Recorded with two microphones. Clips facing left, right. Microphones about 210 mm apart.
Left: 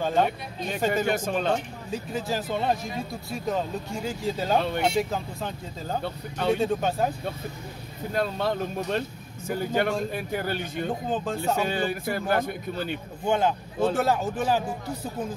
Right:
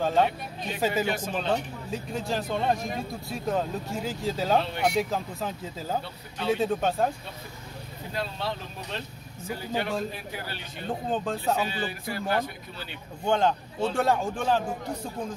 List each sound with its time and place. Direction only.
0.0 s speech: centre (ahead or behind)
1.0 s speech: 45° left (ahead or behind)
1.9 s speech: centre (ahead or behind)
6.0 s speech: 50° left (ahead or behind)
6.5 s speech: centre (ahead or behind)
8.1 s speech: 50° left (ahead or behind)
11.1 s speech: centre (ahead or behind)
11.6 s speech: 50° left (ahead or behind)
13.2 s speech: 5° left (ahead or behind)